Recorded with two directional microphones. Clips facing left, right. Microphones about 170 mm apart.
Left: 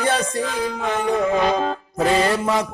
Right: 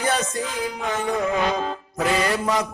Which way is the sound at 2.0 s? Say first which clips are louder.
Left 4 dB; 30° left (ahead or behind).